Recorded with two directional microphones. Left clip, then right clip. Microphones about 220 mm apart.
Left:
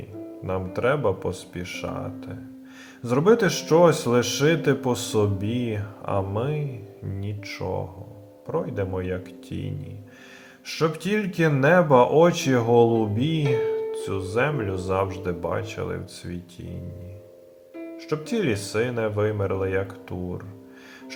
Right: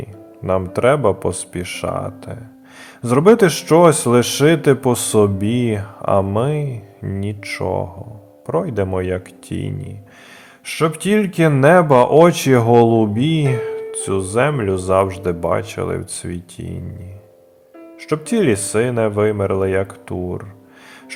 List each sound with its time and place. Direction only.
0.4 s speech: 35° right (ahead or behind)
10.7 s speech: 35° right (ahead or behind)
18.0 s speech: 35° right (ahead or behind)